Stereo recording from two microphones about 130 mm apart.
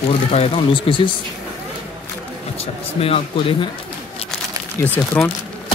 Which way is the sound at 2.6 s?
50° left (ahead or behind).